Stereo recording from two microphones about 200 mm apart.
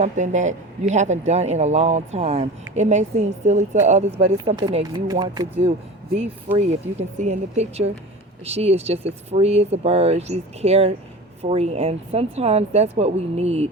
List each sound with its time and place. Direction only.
0.0 s speech: 35° right (ahead or behind)
4.5 s speech: 20° right (ahead or behind)